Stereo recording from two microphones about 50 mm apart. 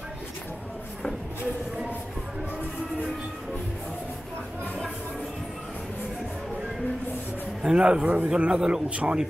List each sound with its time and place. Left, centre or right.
7.6 s a man's voice: right